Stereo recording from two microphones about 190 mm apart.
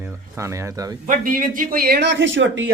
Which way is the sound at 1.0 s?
45° right (ahead or behind).